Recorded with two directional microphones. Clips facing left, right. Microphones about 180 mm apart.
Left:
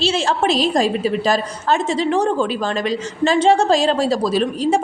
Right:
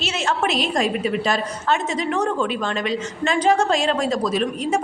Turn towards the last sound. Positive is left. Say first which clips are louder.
# left 4 dB
turn(degrees=30)  # may be behind; listen again after turning